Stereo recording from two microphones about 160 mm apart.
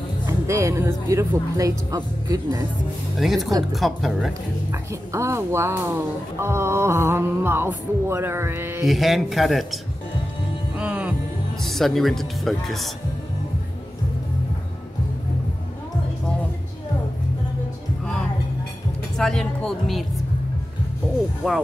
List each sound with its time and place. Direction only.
0.3 s speech: 20° right (ahead or behind)
3.2 s speech: centre (ahead or behind)
5.1 s speech: 15° right (ahead or behind)
8.8 s speech: centre (ahead or behind)
10.8 s music: 10° right (ahead or behind)
11.6 s speech: centre (ahead or behind)
19.1 s speech: 5° left (ahead or behind)
21.4 s speech: centre (ahead or behind)